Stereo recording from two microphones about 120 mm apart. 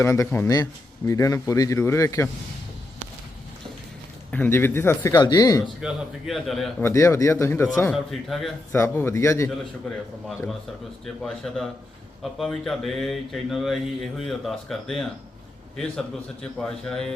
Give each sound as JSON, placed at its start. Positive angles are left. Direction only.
{"t": 0.0, "sound": "a man's voice", "side_deg": 20}
{"t": 4.3, "sound": "a man's voice", "side_deg": 15}
{"t": 5.1, "sound": "speech", "side_deg": 35}
{"t": 5.6, "sound": "speech", "side_deg": 0}
{"t": 6.8, "sound": "a man's voice", "side_deg": 25}
{"t": 7.9, "sound": "speech", "side_deg": 0}
{"t": 8.7, "sound": "a man's voice", "side_deg": 20}
{"t": 11.0, "sound": "speech", "side_deg": 0}